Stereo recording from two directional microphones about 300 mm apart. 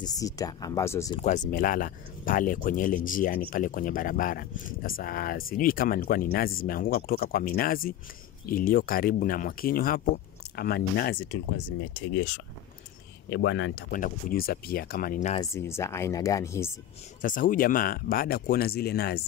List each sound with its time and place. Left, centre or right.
0.0 s speech: centre
1.2 s speech: left
13.3 s speech: left
15.5 s speech: centre
17.2 s speech: left